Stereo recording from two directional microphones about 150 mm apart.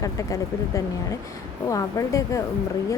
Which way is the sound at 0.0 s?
25° left (ahead or behind).